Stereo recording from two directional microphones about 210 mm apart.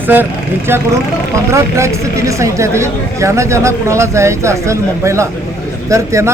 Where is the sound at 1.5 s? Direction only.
15° right (ahead or behind).